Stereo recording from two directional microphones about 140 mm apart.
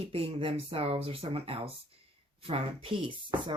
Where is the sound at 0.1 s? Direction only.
40° right (ahead or behind).